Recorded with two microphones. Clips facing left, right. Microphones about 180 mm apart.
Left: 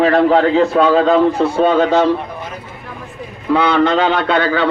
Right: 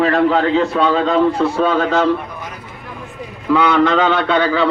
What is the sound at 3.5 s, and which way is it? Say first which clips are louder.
Speech: even; 30° left (ahead or behind).